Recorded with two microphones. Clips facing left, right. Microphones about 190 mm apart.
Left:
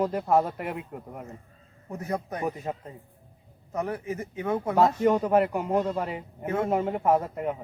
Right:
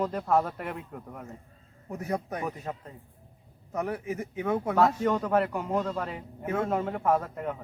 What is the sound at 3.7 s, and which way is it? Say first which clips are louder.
Speech: left 1 dB; 5° right (ahead or behind).